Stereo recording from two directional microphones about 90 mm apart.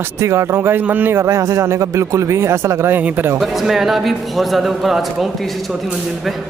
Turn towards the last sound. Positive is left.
turn(degrees=0)  # may be behind; listen again after turning